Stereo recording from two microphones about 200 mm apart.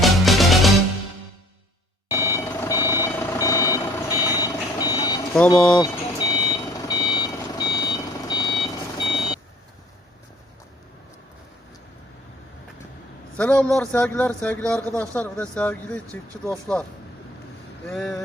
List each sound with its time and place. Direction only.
0.0 s music: centre (ahead or behind)
2.1 s reversing beeps: 15° left (ahead or behind)
5.5 s speech: 5° left (ahead or behind)
5.8 s reversing beeps: 20° left (ahead or behind)
9.0 s reversing beeps: centre (ahead or behind)
13.3 s speech: 5° left (ahead or behind)
17.8 s speech: centre (ahead or behind)